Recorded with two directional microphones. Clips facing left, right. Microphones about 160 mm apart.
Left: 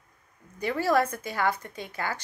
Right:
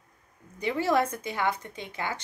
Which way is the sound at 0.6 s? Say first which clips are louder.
Left 1 dB; 20° right (ahead or behind).